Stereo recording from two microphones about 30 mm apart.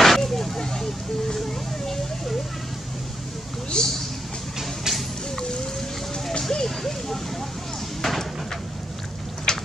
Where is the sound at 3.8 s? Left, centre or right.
Left.